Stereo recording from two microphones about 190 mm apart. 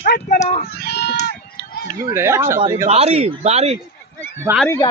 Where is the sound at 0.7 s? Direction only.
60° left (ahead or behind).